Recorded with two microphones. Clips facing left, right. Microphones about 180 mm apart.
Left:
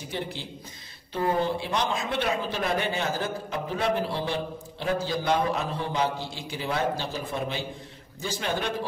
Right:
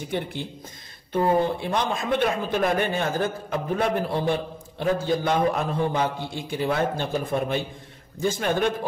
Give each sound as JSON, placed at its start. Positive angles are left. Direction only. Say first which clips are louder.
{"t": 0.1, "sound": "speech", "louder": "right 3 dB", "side_deg": -55}